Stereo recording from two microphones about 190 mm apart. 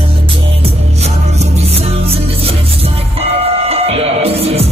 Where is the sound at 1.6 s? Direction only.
30° right (ahead or behind).